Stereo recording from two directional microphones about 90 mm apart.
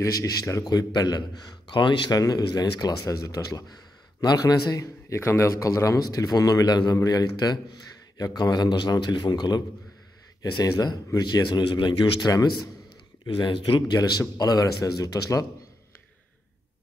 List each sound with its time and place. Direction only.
0.0 s a man's voice: 40° left (ahead or behind)
5.1 s a man's voice: 30° left (ahead or behind); by 9.6 s 50° left (ahead or behind)
11.2 s speech: 55° left (ahead or behind)
12.2 s a man's voice: 45° left (ahead or behind)
13.4 s a man's voice: 65° left (ahead or behind); by 15.4 s 40° left (ahead or behind)